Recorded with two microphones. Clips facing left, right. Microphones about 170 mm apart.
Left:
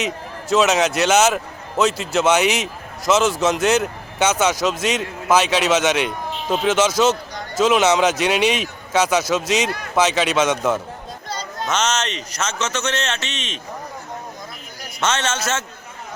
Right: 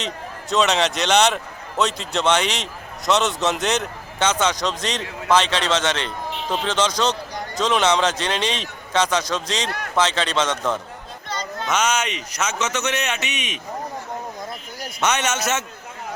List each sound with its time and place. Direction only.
0.5 s speech: 5° left (ahead or behind)
11.7 s a man's voice: 10° right (ahead or behind)
15.0 s a man's voice: 15° right (ahead or behind)